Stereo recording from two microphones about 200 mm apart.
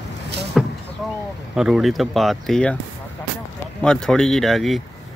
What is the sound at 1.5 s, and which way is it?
Speech, 5° right (ahead or behind).